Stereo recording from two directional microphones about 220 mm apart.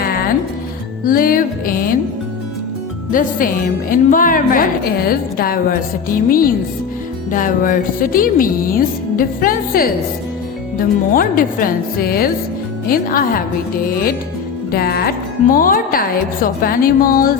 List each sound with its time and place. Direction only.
1.0 s speech: 40° left (ahead or behind)
3.1 s speech: 40° left (ahead or behind)
11.1 s speech: 40° left (ahead or behind)
14.7 s speech: 45° left (ahead or behind)